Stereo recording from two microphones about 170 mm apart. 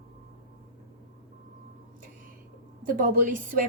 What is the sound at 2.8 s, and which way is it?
Speech, 55° right (ahead or behind).